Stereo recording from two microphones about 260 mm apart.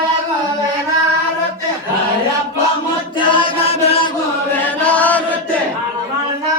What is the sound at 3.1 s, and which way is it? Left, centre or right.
Chant, left.